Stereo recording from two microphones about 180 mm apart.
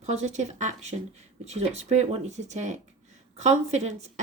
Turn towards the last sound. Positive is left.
turn(degrees=-40)  # may be behind; listen again after turning